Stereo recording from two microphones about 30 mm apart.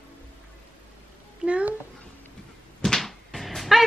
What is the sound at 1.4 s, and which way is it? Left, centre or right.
Speech, right.